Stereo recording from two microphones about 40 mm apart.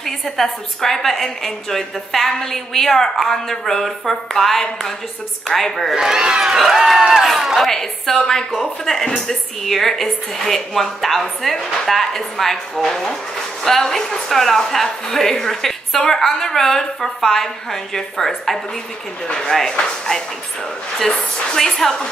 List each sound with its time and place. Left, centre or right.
0.0 s a woman's voice: centre
5.9 s a woman's voice: centre
7.7 s a woman's voice: centre
19.2 s speech: left
21.0 s a woman's voice: centre